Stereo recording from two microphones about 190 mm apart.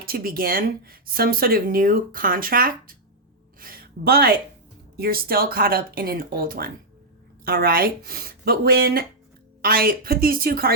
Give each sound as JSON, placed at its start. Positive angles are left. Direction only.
{"t": 0.0, "sound": "a woman's voice", "side_deg": -50}